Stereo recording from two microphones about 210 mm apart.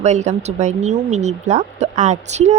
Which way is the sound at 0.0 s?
35° right (ahead or behind).